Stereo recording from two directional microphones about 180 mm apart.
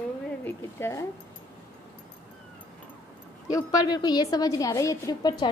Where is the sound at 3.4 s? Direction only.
20° left (ahead or behind).